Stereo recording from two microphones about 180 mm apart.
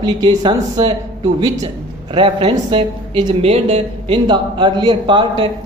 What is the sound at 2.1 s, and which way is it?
Speech, 30° right (ahead or behind).